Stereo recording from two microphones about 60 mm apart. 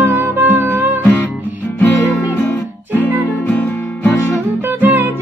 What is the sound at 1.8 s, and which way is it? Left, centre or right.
Music, left.